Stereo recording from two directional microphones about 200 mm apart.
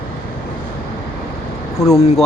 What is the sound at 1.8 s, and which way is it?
Speech, 15° left (ahead or behind).